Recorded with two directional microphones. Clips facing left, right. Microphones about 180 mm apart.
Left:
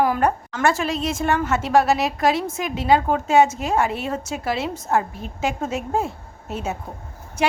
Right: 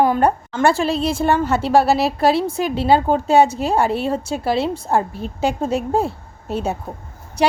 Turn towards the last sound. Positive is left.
turn(degrees=-35)  # may be behind; listen again after turning